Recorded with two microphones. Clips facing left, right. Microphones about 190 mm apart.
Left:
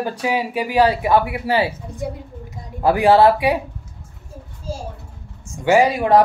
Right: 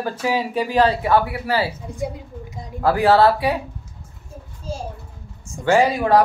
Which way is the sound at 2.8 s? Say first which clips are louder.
Left 2 dB; 15° left (ahead or behind).